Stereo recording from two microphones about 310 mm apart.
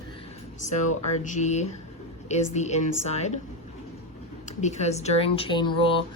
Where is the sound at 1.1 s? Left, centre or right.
Left.